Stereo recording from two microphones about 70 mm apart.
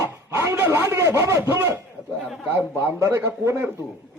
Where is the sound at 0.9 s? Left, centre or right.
Right.